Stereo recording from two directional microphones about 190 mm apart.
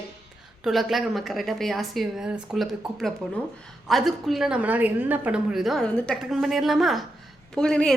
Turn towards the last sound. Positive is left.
turn(degrees=5)  # may be behind; listen again after turning